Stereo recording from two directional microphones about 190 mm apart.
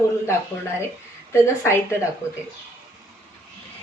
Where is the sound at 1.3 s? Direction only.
15° left (ahead or behind).